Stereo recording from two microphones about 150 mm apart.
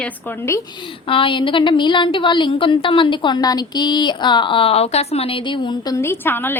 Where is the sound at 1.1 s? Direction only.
35° left (ahead or behind).